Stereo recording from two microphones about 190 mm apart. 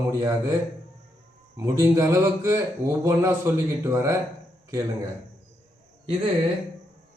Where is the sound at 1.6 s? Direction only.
15° right (ahead or behind).